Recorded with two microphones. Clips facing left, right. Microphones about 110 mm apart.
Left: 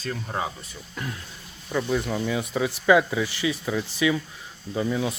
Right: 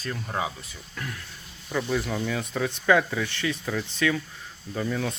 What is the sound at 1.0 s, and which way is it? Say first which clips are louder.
Speech: left 2 dB; 20° left (ahead or behind).